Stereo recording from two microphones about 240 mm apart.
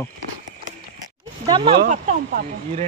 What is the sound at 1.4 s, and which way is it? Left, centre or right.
Speech, centre.